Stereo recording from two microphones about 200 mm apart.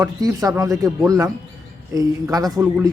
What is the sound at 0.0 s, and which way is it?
Speech, 15° right (ahead or behind).